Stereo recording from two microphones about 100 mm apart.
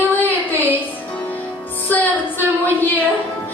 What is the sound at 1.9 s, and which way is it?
Speech, 20° left (ahead or behind).